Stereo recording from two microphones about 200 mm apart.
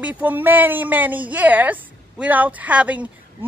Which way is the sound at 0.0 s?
10° right (ahead or behind).